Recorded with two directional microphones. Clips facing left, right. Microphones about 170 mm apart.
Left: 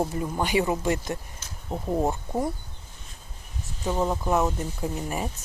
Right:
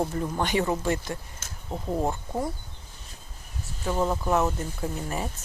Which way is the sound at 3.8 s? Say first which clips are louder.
Even; 15° left (ahead or behind).